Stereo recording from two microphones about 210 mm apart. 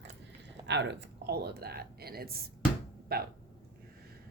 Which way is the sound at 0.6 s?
55° right (ahead or behind).